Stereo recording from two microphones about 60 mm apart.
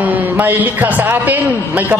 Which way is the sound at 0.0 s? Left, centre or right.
Right.